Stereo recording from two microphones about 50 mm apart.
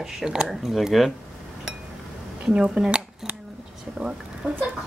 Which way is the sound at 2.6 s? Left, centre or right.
Centre.